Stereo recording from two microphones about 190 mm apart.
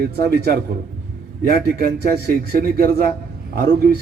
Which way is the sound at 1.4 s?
55° right (ahead or behind).